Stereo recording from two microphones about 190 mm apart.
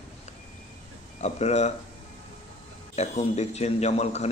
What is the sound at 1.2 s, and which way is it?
Speech, 35° left (ahead or behind).